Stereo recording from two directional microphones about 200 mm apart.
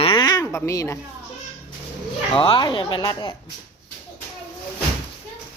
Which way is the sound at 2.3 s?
25° left (ahead or behind).